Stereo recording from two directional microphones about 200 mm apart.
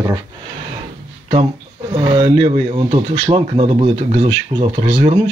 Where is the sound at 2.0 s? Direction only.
30° right (ahead or behind).